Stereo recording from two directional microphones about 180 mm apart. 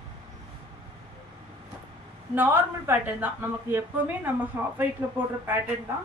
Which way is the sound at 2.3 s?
10° right (ahead or behind).